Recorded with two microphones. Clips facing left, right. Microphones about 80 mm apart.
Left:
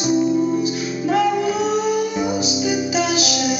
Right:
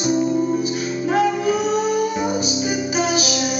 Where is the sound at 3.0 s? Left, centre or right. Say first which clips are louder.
Right 2 dB; right.